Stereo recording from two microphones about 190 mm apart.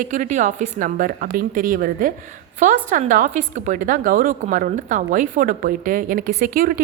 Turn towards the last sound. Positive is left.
turn(degrees=-50)  # may be behind; listen again after turning